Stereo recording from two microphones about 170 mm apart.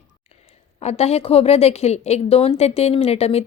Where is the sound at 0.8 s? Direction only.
40° left (ahead or behind).